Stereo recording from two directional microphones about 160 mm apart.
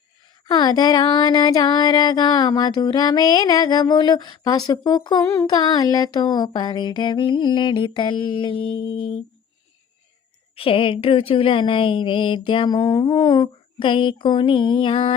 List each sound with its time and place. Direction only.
0.4 s music: 25° left (ahead or behind)
10.5 s speech: 35° left (ahead or behind)